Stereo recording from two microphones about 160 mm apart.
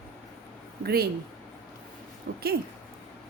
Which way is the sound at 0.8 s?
75° right (ahead or behind).